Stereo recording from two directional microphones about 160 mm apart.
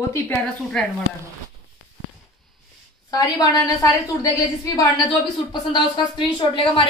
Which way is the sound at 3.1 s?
25° left (ahead or behind).